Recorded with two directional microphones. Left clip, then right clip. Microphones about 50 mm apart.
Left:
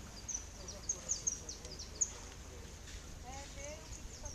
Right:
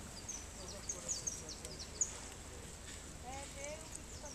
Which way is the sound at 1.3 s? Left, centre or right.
Centre.